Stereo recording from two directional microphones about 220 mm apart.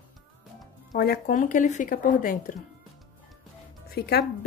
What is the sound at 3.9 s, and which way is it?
Speech, 45° left (ahead or behind).